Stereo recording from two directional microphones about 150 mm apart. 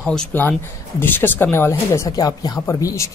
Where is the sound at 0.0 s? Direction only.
5° left (ahead or behind).